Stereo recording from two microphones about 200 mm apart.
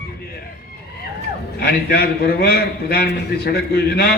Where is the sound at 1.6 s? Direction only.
50° left (ahead or behind).